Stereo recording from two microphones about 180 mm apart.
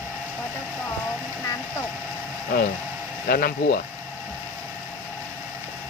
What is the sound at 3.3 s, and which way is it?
Speech, 55° left (ahead or behind).